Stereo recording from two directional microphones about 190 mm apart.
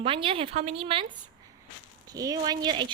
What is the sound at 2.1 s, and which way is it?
Speech, 20° right (ahead or behind).